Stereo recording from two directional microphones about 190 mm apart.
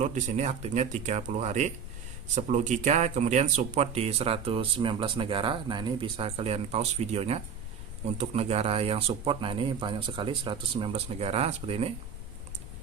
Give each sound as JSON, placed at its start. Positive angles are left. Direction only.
{"t": 0.0, "sound": "speech", "side_deg": -40}